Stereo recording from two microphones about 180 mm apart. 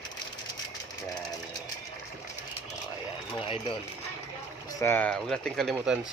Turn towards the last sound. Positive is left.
turn(degrees=0)  # may be behind; listen again after turning